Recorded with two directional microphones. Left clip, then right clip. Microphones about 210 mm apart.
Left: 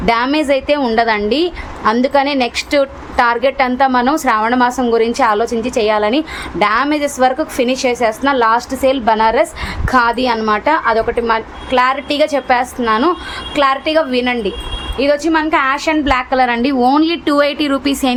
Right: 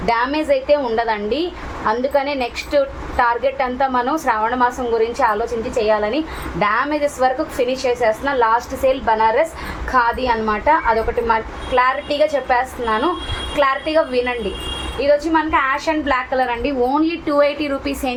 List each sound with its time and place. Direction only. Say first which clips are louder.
0.0 s a woman's voice: left 4 dB; 50° left (ahead or behind)